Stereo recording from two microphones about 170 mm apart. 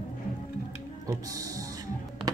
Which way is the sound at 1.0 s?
20° right (ahead or behind).